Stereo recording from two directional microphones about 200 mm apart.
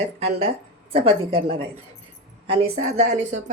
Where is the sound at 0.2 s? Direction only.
30° right (ahead or behind).